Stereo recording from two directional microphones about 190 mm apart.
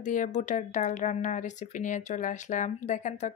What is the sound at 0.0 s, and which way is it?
Speech, 40° left (ahead or behind).